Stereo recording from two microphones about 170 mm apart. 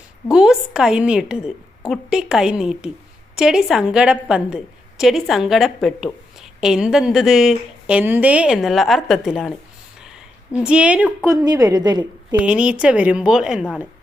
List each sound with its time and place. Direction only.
0.3 s a woman's voice: 5° right (ahead or behind)
10.6 s a woman's voice: 5° right (ahead or behind)
11.4 s a woman's voice: 20° right (ahead or behind)
12.4 s a woman's voice: 5° right (ahead or behind)